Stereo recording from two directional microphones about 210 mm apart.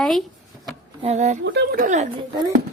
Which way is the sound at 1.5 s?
45° right (ahead or behind).